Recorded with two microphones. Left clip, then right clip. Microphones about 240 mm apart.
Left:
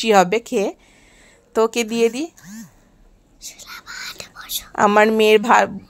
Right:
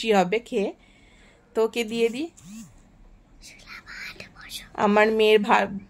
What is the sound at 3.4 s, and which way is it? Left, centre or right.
Speech, centre.